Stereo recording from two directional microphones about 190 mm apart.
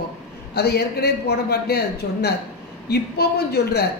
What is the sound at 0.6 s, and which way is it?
A man's voice, 60° left (ahead or behind).